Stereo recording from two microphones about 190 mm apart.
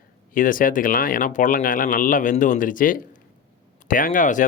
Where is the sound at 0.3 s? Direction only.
45° left (ahead or behind).